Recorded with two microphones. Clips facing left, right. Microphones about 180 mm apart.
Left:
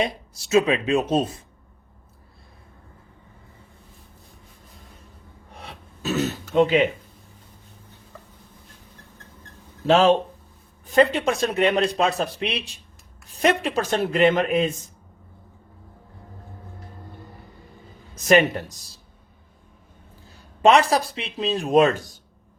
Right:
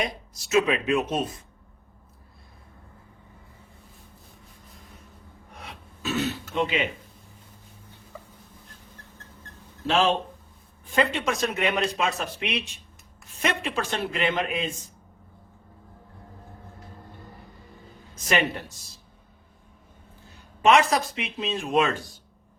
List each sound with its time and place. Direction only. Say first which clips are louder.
0.0 s speech: left 5 dB; 30° left (ahead or behind)
5.5 s throat clearing: left 2 dB; 35° left (ahead or behind)
9.8 s speech: left 6 dB; 40° left (ahead or behind)
18.3 s speech: left 8 dB; 45° left (ahead or behind)
20.3 s speech: left 3 dB; 35° left (ahead or behind)